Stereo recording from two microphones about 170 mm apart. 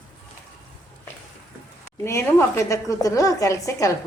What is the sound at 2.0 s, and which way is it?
A woman's voice, 15° left (ahead or behind).